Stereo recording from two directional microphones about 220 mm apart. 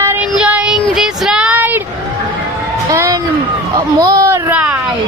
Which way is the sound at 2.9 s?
15° right (ahead or behind).